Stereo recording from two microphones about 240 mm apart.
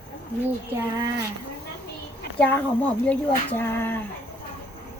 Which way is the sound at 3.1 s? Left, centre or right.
Centre.